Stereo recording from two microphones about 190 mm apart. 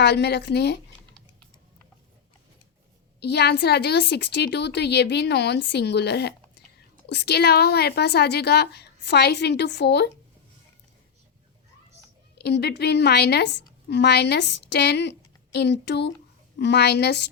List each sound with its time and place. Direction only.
0.0 s a woman's voice: 60° left (ahead or behind)
3.2 s a woman's voice: 60° left (ahead or behind)
12.4 s a woman's voice: 60° left (ahead or behind)